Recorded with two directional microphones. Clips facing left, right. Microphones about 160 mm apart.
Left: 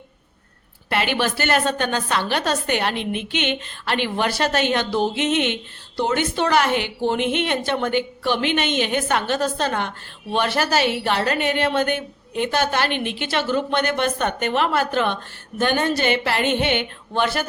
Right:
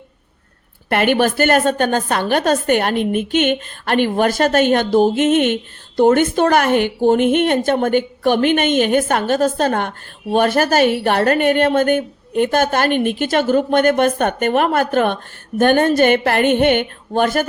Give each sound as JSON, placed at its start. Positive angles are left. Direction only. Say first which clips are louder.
{"t": 0.9, "sound": "a woman's voice", "louder": "right 7 dB", "side_deg": -50}